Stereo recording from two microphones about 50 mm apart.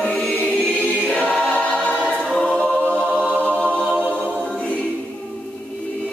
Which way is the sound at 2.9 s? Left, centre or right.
Right.